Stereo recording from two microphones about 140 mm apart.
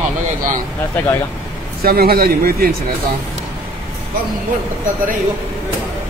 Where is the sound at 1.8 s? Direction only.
90° right.